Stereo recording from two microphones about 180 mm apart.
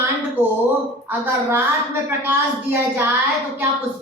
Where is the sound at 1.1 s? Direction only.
15° right (ahead or behind).